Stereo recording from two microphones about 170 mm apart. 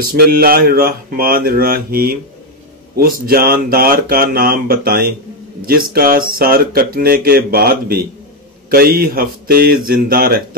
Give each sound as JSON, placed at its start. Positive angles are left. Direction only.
{"t": 0.0, "sound": "speech", "side_deg": -60}